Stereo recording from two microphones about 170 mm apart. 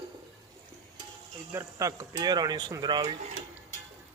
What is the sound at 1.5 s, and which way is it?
Speech, 20° right (ahead or behind).